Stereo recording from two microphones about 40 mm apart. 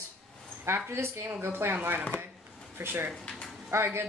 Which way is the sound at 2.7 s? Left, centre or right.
Right.